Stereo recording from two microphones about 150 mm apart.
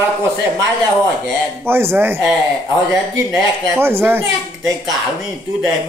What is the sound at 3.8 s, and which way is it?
Speech, 15° right (ahead or behind).